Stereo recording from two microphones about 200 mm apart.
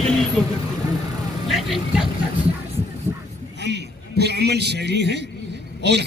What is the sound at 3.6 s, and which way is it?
A man's voice, 60° right (ahead or behind).